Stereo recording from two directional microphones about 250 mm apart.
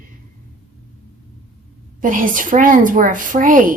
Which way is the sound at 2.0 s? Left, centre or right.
Right.